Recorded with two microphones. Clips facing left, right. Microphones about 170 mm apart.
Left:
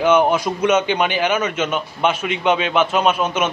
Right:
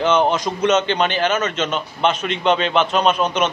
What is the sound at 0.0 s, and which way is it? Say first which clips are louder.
A man's voice: left 2 dB; 10° left (ahead or behind).